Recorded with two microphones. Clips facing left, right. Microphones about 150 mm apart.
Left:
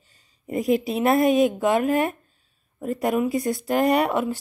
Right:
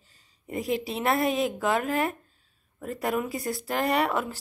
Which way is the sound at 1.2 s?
30° right (ahead or behind).